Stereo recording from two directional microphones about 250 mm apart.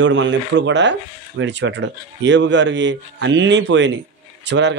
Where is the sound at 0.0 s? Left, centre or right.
Right.